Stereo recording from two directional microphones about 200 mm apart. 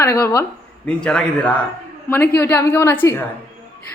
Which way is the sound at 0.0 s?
15° left (ahead or behind).